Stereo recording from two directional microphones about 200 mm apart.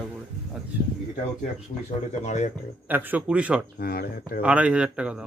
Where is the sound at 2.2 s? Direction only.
35° left (ahead or behind).